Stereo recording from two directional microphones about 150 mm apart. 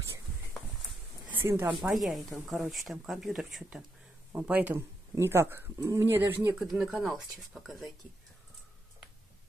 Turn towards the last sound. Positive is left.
turn(degrees=0)  # may be behind; listen again after turning